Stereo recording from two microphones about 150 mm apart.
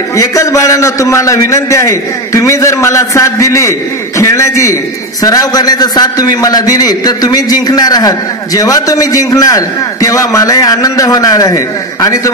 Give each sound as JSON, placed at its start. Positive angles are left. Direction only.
{"t": 0.2, "sound": "a man's voice", "side_deg": 20}